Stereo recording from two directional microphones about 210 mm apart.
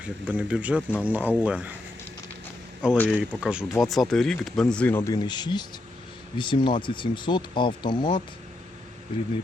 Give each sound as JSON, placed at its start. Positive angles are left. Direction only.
{"t": 0.3, "sound": "speech", "side_deg": -5}
{"t": 0.8, "sound": "speech", "side_deg": 5}
{"t": 1.0, "sound": "speech", "side_deg": -5}
{"t": 2.8, "sound": "speech", "side_deg": -5}